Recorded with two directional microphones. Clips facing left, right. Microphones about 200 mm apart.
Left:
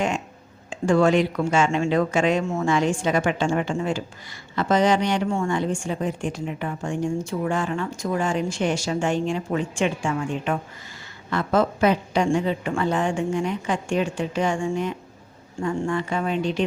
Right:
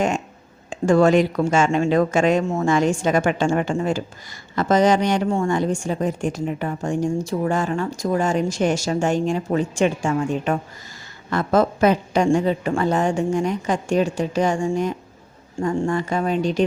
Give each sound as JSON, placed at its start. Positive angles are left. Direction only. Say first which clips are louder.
{"t": 0.7, "sound": "a woman's voice", "louder": "right 3 dB", "side_deg": -45}